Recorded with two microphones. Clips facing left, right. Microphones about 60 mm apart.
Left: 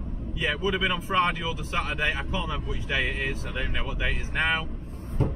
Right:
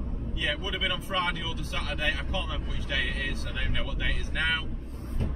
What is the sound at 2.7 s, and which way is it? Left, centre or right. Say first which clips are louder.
Speech: left 4 dB; centre.